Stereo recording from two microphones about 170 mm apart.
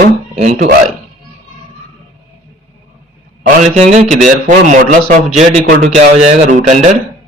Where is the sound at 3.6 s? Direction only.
40° right (ahead or behind).